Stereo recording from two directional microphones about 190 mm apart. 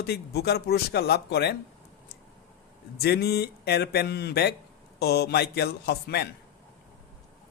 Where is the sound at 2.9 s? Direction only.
55° left (ahead or behind).